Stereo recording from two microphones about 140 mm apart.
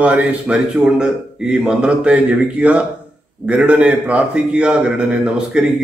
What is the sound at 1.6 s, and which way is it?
A man's voice, 10° right (ahead or behind).